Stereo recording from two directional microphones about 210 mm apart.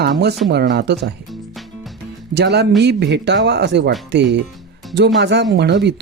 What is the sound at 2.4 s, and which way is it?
Speech, 55° right (ahead or behind).